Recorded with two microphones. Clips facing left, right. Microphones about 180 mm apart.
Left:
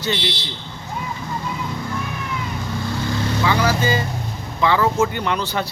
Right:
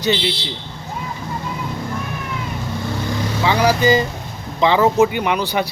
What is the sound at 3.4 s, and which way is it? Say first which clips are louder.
Speech: right 5 dB; 20° right (ahead or behind).